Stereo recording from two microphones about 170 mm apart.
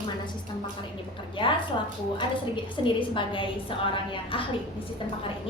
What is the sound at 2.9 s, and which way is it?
Speech, 30° left (ahead or behind).